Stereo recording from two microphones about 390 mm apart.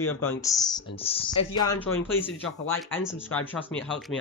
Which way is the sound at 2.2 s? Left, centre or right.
Centre.